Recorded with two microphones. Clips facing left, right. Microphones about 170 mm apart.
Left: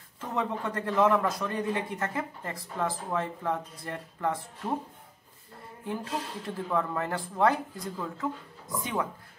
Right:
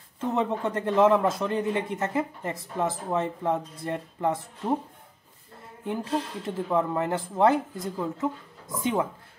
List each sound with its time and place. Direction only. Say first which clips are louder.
0.2 s speech: right 5 dB; 25° right (ahead or behind)
6.4 s speech: right 2 dB; 20° right (ahead or behind)